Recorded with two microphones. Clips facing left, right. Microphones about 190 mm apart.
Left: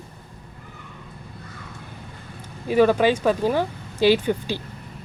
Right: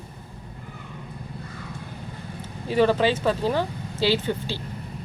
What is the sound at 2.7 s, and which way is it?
Speech, 10° left (ahead or behind).